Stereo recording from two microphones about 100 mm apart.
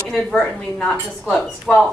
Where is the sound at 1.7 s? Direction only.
5° left (ahead or behind).